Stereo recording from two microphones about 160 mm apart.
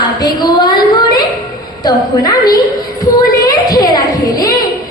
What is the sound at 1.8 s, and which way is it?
Speech, 25° left (ahead or behind).